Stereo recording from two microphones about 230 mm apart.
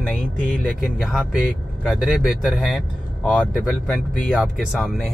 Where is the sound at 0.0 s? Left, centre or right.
Centre.